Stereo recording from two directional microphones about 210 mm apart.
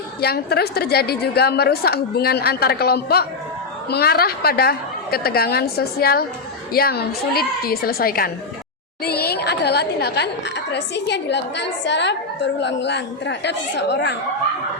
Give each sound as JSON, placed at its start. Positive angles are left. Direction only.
{"t": 0.2, "sound": "a woman's voice", "side_deg": 50}